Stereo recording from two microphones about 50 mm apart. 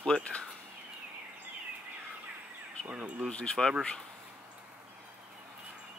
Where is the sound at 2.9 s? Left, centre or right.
Right.